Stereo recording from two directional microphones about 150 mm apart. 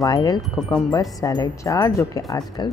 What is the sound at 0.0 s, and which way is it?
Speech, 25° left (ahead or behind).